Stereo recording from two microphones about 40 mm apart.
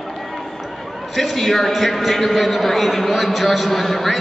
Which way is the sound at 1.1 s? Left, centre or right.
Centre.